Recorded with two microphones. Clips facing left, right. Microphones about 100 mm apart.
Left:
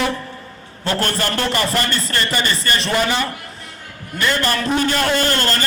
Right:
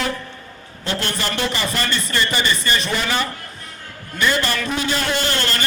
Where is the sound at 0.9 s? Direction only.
45° left (ahead or behind).